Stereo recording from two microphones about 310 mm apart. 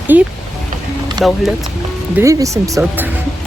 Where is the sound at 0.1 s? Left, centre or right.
Centre.